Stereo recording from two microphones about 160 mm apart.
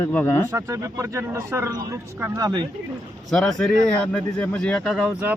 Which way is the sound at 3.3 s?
Centre (ahead or behind).